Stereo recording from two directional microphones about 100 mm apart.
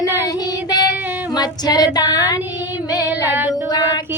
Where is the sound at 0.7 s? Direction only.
45° left (ahead or behind).